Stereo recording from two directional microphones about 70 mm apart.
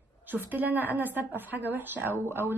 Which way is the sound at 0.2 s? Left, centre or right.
Right.